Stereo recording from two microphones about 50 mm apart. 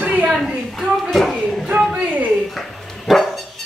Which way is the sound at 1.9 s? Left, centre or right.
Right.